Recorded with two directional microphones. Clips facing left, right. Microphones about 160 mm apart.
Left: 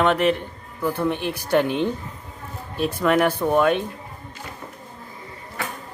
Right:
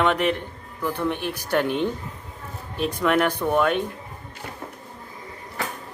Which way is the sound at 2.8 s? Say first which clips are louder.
Left 2 dB; 5° left (ahead or behind).